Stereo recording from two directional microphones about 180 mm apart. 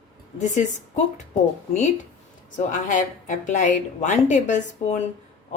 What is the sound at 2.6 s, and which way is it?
Speech, 45° left (ahead or behind).